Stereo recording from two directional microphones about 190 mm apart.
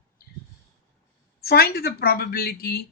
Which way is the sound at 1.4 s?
55° left (ahead or behind).